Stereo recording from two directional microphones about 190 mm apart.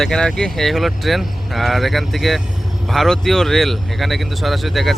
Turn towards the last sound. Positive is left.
turn(degrees=0)  # may be behind; listen again after turning